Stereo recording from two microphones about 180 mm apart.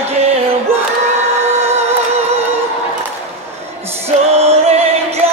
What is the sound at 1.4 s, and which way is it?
Music, 15° right (ahead or behind).